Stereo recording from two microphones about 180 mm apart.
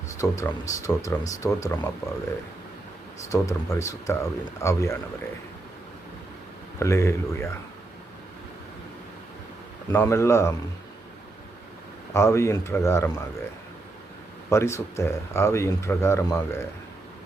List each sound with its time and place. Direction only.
0.2 s speech: 15° left (ahead or behind)
3.2 s speech: 15° left (ahead or behind)
6.7 s speech: 15° left (ahead or behind)
9.9 s speech: 15° left (ahead or behind)
12.1 s speech: 15° left (ahead or behind)
14.5 s speech: 15° left (ahead or behind)